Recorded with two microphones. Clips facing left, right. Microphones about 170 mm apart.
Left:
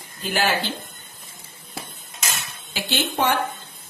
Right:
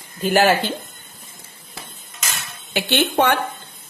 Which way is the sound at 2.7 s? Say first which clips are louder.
Right 6 dB; 65° right (ahead or behind).